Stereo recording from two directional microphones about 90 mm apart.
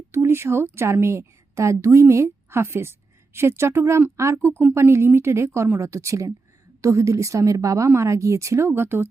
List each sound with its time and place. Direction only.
0.1 s a woman's voice: 25° right (ahead or behind)